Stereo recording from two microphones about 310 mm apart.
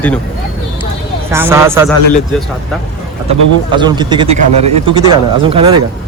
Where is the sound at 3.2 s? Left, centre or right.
Centre.